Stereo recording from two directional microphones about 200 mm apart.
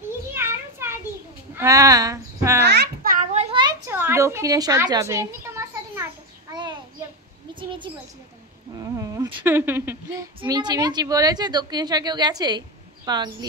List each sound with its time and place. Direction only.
0.3 s children playing: 10° right (ahead or behind)
1.5 s speech: 15° right (ahead or behind)
2.6 s babbling: 55° right (ahead or behind)
3.3 s a sound: 25° right (ahead or behind)
8.7 s speech: 15° right (ahead or behind)